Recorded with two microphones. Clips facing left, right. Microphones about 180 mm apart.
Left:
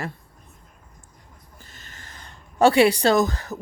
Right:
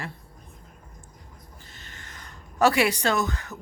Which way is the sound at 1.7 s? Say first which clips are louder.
Left 1 dB; 45° left (ahead or behind).